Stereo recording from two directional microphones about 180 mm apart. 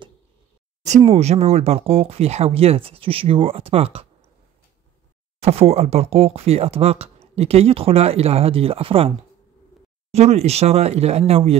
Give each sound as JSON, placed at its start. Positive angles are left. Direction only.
{"t": 0.8, "sound": "speech", "side_deg": -35}
{"t": 5.4, "sound": "speech", "side_deg": -35}
{"t": 10.1, "sound": "speech", "side_deg": -35}